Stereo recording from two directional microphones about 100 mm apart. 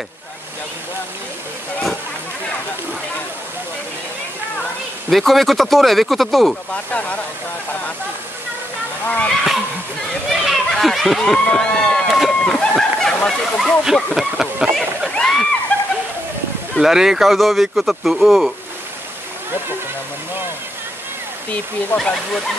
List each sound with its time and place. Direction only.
5.1 s speech: centre (ahead or behind)
6.7 s speech: 15° left (ahead or behind)
9.0 s speech: 15° left (ahead or behind)
10.3 s a sound: centre (ahead or behind)
13.8 s speech: 5° right (ahead or behind)
14.8 s a sound: 5° left (ahead or behind)
16.7 s speech: 5° right (ahead or behind)
21.9 s speech: 5° left (ahead or behind)